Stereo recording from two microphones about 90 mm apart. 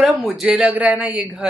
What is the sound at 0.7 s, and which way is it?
Speech, 20° right (ahead or behind).